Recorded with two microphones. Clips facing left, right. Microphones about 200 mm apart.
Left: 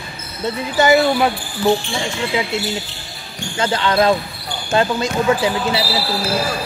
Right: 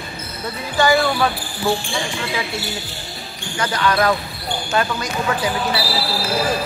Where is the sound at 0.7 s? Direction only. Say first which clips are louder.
Left 3 dB; 20° left (ahead or behind).